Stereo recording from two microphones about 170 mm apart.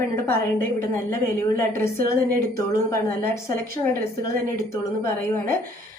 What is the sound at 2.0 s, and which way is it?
Speech, 60° right (ahead or behind).